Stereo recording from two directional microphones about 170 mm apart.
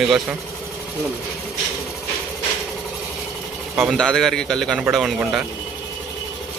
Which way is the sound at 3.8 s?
5° left (ahead or behind).